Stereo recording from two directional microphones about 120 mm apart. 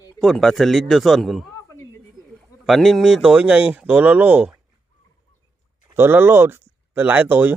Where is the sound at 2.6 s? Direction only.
Centre (ahead or behind).